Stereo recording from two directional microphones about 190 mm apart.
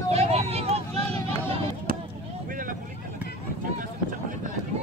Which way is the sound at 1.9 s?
50° right (ahead or behind).